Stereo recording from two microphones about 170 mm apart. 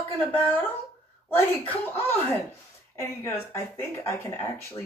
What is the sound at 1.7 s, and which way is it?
Speech, 10° left (ahead or behind).